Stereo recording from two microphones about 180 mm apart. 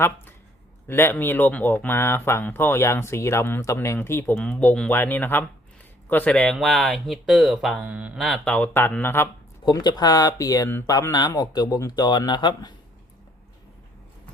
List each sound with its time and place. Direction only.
0.9 s speech: 10° left (ahead or behind)
9.6 s speech: 25° left (ahead or behind)